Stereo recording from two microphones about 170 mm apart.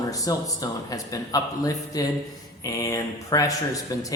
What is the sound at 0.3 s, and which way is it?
Speech, 20° left (ahead or behind).